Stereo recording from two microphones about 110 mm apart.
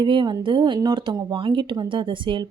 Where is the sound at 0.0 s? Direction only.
45° right (ahead or behind).